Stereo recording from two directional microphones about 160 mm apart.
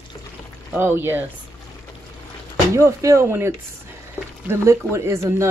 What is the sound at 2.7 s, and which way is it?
Speech, 20° right (ahead or behind).